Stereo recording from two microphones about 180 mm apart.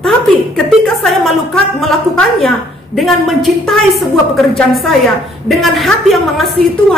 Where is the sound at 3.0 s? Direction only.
Centre (ahead or behind).